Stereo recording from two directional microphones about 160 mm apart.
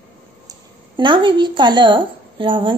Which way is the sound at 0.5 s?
30° right (ahead or behind).